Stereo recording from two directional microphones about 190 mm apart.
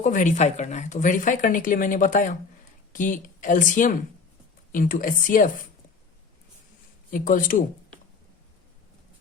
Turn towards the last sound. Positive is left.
turn(degrees=45)  # may be behind; listen again after turning